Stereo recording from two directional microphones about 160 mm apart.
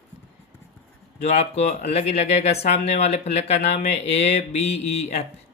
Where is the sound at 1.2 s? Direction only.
45° left (ahead or behind).